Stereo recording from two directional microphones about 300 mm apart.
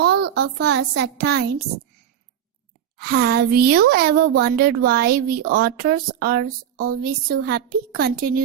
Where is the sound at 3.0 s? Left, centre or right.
Right.